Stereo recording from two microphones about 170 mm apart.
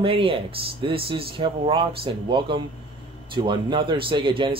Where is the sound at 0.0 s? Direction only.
30° right (ahead or behind).